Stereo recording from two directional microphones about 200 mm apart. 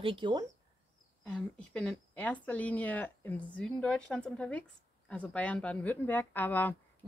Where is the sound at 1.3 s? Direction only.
5° left (ahead or behind).